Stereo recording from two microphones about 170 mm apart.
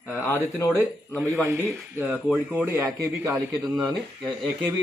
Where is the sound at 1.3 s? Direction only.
15° right (ahead or behind).